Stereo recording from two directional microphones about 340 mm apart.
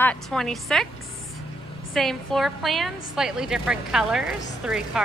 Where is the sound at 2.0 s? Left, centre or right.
Centre.